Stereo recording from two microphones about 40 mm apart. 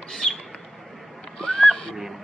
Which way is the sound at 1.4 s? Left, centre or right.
Left.